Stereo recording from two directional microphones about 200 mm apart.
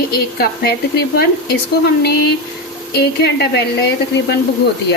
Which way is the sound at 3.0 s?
55° left (ahead or behind).